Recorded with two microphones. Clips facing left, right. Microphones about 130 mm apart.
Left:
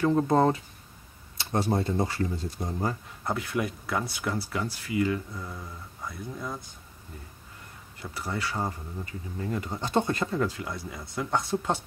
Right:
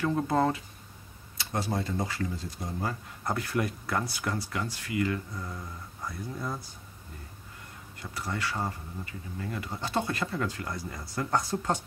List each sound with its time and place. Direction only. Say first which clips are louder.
0.0 s speech: left 4 dB; 25° left (ahead or behind)
2.6 s speech: left 4 dB; 40° left (ahead or behind)
3.3 s speech: left 1 dB; 5° left (ahead or behind)
5.3 s speech: even; 5° left (ahead or behind)
8.2 s speech: left 1 dB; 10° left (ahead or behind)
9.0 s speech: left 4 dB; 30° left (ahead or behind)
10.4 s speech: left 3 dB; 10° left (ahead or behind)